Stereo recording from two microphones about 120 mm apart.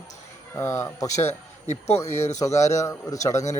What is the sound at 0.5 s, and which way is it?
Speech, 25° left (ahead or behind).